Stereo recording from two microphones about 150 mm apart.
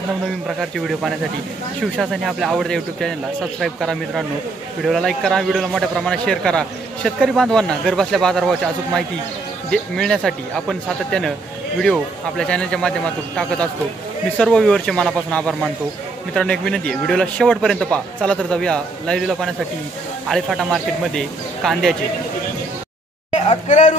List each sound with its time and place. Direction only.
0.6 s a man's voice: centre (ahead or behind)
23.3 s speech: 50° left (ahead or behind)